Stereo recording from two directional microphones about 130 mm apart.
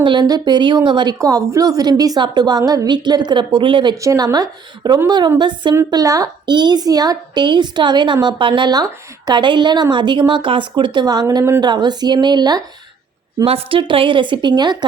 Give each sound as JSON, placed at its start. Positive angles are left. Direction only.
{"t": 0.0, "sound": "a woman's voice", "side_deg": -35}
{"t": 4.0, "sound": "a woman's voice", "side_deg": -25}
{"t": 5.7, "sound": "a woman's voice", "side_deg": -25}
{"t": 11.6, "sound": "a woman's voice", "side_deg": -35}
{"t": 13.4, "sound": "a woman's voice", "side_deg": -45}